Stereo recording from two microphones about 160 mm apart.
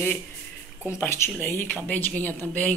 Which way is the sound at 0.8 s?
15° left (ahead or behind).